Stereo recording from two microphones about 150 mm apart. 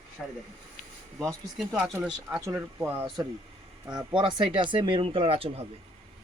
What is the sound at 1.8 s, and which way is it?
Speech, 5° right (ahead or behind).